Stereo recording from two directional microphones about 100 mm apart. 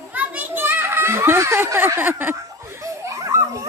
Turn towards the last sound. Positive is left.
turn(degrees=-30)  # may be behind; listen again after turning